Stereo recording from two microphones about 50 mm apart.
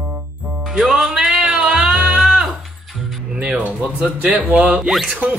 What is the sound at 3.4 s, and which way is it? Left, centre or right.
Music, right.